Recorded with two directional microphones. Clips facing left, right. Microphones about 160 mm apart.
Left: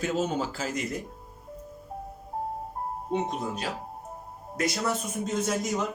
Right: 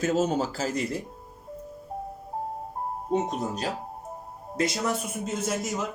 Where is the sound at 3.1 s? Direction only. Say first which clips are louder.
Right 3 dB; 40° right (ahead or behind).